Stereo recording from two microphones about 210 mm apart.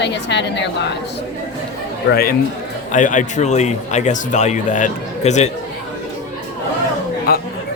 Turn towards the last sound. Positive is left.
turn(degrees=45)  # may be behind; listen again after turning